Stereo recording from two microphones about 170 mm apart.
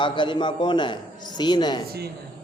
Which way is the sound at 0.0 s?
30° left (ahead or behind).